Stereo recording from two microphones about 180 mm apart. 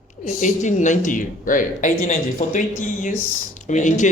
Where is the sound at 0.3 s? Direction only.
45° left (ahead or behind).